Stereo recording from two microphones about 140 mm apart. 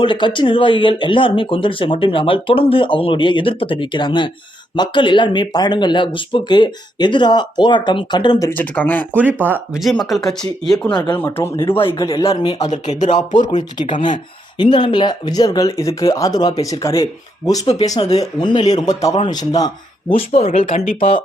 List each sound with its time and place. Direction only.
0.0 s speech: 35° left (ahead or behind)
8.4 s speech: 10° left (ahead or behind)
9.1 s speech: 15° right (ahead or behind)
9.8 s speech: centre (ahead or behind)
10.9 s speech: 30° left (ahead or behind)
11.3 s speech: 20° left (ahead or behind)
12.0 s speech: 40° left (ahead or behind)
12.3 s speech: 30° left (ahead or behind)
12.6 s speech: 55° left (ahead or behind)
13.1 s speech: 35° left (ahead or behind)
13.4 s speech: 60° left (ahead or behind)
13.8 s speech: 35° left (ahead or behind)
20.1 s speech: 45° left (ahead or behind)